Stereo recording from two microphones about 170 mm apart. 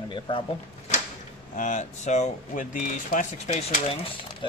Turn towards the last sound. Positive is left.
turn(degrees=35)  # may be behind; listen again after turning